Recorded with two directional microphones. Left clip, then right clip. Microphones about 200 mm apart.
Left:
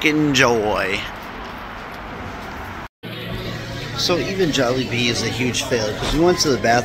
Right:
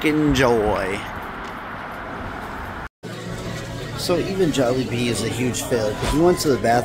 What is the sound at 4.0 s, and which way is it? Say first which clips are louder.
Speech: left 1 dB; 10° right (ahead or behind).